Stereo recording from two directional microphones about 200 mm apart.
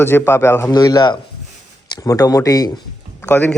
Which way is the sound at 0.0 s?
10° left (ahead or behind).